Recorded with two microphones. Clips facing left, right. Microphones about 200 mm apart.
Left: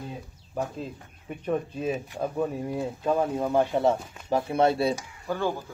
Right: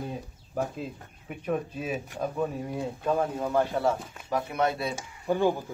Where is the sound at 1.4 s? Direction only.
10° right (ahead or behind).